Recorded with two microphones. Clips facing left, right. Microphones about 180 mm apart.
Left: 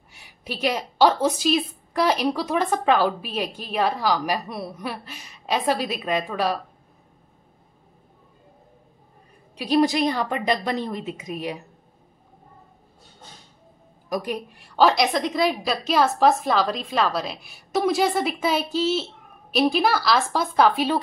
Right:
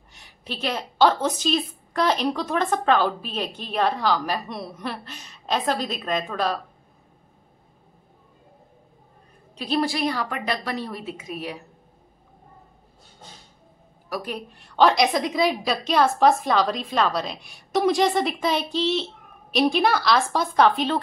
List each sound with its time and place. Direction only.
0.1 s a woman's voice: 10° left (ahead or behind)
9.6 s a woman's voice: 15° left (ahead or behind)
14.0 s a woman's voice: 15° left (ahead or behind)
14.8 s a woman's voice: centre (ahead or behind)